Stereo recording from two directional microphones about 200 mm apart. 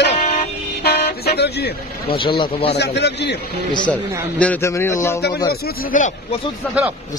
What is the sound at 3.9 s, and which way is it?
A man's voice, 5° left (ahead or behind).